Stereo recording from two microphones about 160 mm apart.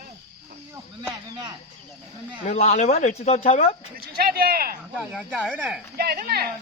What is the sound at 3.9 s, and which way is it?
Speech, 70° right (ahead or behind).